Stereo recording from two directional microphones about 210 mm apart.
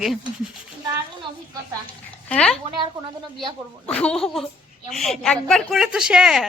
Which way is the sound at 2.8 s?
20° right (ahead or behind).